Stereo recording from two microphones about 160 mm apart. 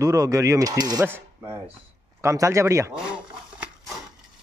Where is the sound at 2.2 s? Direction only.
20° right (ahead or behind).